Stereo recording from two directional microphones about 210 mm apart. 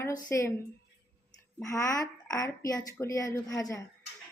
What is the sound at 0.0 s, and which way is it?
Speech, 15° left (ahead or behind).